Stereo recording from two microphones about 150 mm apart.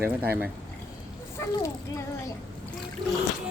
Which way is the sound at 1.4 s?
15° left (ahead or behind).